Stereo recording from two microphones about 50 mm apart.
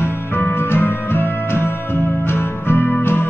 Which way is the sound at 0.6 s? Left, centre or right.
Left.